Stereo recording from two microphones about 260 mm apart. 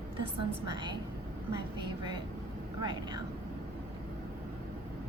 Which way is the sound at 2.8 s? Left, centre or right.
Centre.